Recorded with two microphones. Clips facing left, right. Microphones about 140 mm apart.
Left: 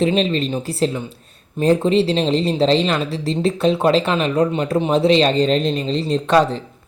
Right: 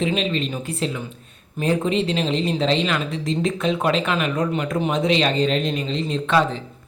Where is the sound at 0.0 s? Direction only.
35° left (ahead or behind).